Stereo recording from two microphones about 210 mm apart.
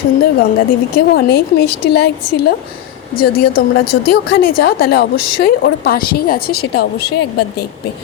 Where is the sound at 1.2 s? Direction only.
50° left (ahead or behind).